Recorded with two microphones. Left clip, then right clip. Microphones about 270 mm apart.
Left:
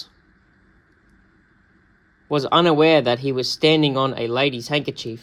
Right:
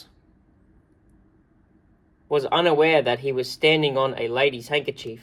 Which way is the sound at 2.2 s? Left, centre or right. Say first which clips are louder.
Left 3 dB; left.